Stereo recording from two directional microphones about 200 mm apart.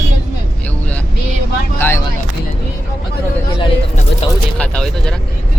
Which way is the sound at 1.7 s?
10° left (ahead or behind).